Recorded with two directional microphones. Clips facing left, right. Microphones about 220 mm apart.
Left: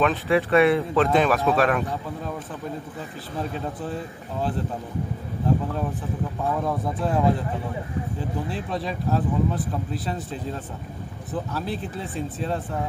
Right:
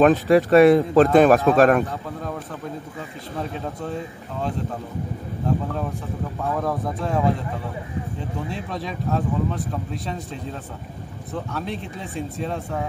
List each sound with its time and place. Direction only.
0.0 s speech: 45° right (ahead or behind)
3.8 s speech: 5° left (ahead or behind)
6.6 s speech: centre (ahead or behind)
8.5 s speech: centre (ahead or behind)